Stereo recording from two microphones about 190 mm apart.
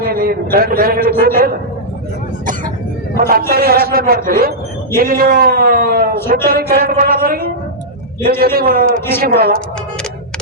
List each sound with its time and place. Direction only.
0.0 s a man's voice: 50° right (ahead or behind)
3.2 s a man's voice: 50° right (ahead or behind)